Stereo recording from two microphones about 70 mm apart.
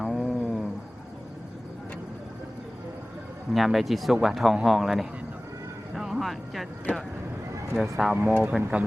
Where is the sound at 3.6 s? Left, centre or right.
Centre.